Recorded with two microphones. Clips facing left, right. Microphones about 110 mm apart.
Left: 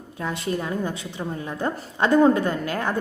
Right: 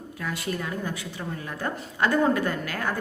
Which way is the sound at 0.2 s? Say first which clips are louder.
Left 4 dB; 25° left (ahead or behind).